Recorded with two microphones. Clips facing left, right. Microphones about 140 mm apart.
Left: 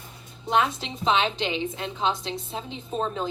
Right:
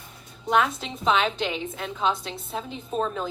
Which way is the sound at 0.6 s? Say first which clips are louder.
Right 1 dB; centre (ahead or behind).